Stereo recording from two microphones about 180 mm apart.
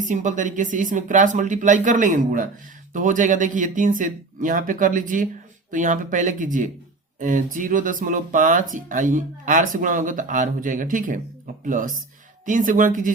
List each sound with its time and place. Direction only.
0.0 s speech: 45° right (ahead or behind)